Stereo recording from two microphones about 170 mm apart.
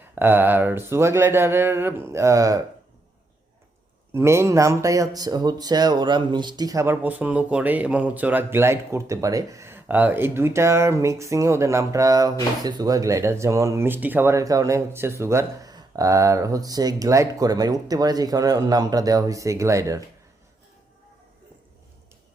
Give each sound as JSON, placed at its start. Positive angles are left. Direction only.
{"t": 0.0, "sound": "speech", "side_deg": -10}
{"t": 4.1, "sound": "speech", "side_deg": -15}